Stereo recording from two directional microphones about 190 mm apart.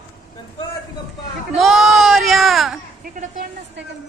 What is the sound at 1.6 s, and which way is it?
A woman's voice, centre (ahead or behind).